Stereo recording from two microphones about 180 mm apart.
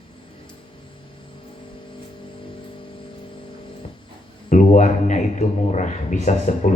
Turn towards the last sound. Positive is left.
turn(degrees=40)  # may be behind; listen again after turning